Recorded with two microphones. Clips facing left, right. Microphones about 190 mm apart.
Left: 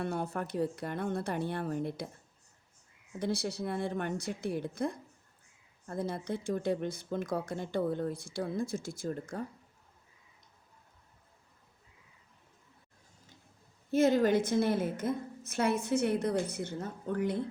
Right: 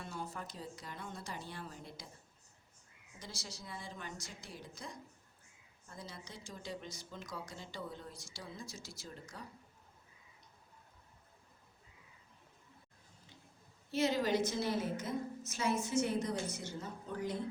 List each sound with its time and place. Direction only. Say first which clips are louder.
0.0 s speech: left 10 dB; 60° left (ahead or behind)
3.2 s speech: left 17 dB; 60° left (ahead or behind)
13.9 s speech: left 7 dB; 50° left (ahead or behind)